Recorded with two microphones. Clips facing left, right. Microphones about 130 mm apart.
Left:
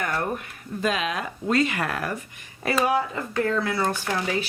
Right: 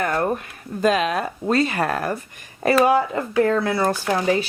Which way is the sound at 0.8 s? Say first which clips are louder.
Right 7 dB; 40° right (ahead or behind).